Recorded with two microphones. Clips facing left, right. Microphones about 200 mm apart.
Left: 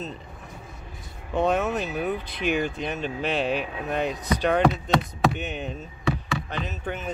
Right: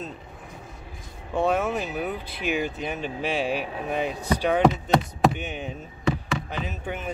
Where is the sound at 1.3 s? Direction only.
10° right (ahead or behind).